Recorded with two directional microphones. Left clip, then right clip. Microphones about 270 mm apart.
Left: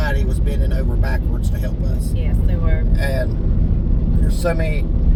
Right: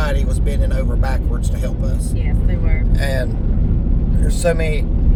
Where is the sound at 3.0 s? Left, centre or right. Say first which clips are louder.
Right 1 dB; centre.